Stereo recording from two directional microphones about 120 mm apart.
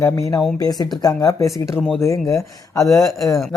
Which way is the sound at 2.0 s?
25° left (ahead or behind).